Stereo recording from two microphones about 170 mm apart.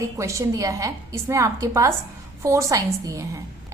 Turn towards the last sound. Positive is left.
turn(degrees=-20)  # may be behind; listen again after turning